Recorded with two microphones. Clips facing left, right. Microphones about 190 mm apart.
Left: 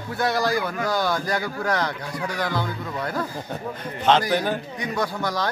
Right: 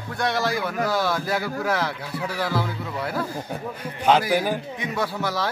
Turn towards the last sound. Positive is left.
turn(degrees=-5)  # may be behind; listen again after turning